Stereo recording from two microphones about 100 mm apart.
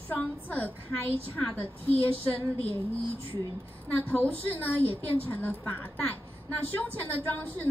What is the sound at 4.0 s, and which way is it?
A woman's voice, 15° left (ahead or behind).